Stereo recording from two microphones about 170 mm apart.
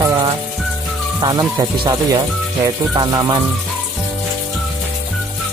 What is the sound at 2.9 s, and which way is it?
Speech, 25° right (ahead or behind).